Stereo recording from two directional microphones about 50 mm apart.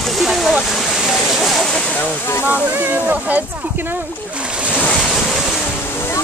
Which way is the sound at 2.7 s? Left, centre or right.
Right.